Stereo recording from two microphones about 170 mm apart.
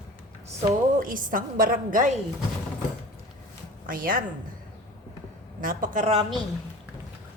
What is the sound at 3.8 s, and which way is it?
Speech, 55° right (ahead or behind).